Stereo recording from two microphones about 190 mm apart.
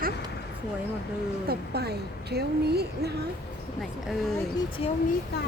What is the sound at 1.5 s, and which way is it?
A woman's voice, 55° right (ahead or behind).